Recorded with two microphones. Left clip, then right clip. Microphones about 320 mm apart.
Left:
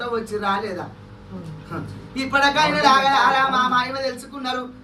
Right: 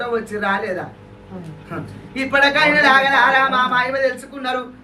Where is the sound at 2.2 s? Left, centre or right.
Centre.